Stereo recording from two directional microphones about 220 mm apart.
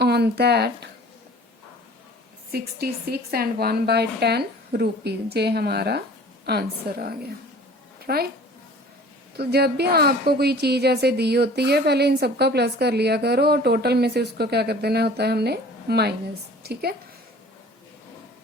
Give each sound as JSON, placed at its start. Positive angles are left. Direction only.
{"t": 0.0, "sound": "speech", "side_deg": -50}
{"t": 2.5, "sound": "a woman's voice", "side_deg": -45}
{"t": 9.4, "sound": "a woman's voice", "side_deg": -45}